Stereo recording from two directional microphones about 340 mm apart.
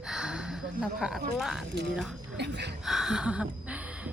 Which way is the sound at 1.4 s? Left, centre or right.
Centre.